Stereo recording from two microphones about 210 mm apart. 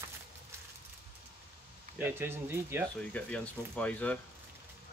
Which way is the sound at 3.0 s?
5° left (ahead or behind).